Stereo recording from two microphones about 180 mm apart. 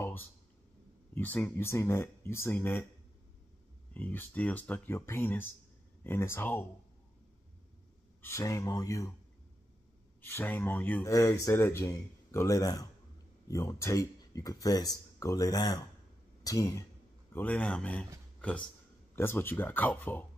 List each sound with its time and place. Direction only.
0.0 s a sound: 10° left (ahead or behind)
1.1 s speech: 10° left (ahead or behind)
3.9 s speech: 10° left (ahead or behind)
8.2 s speech: 15° left (ahead or behind)
10.2 s speech: 10° left (ahead or behind)
19.1 s speech: 10° left (ahead or behind)